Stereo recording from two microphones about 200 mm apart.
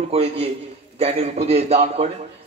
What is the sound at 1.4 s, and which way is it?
Speech, 30° right (ahead or behind).